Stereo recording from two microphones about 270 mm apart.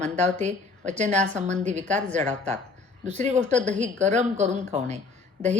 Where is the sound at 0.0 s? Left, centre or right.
Right.